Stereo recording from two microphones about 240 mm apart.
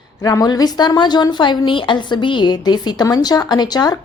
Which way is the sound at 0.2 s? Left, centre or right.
Centre.